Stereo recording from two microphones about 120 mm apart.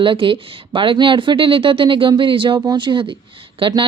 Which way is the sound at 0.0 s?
45° right (ahead or behind).